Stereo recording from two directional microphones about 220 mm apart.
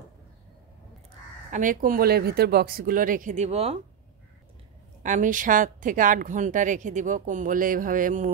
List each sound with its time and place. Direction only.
1.5 s speech: 35° right (ahead or behind)
5.0 s speech: 35° right (ahead or behind)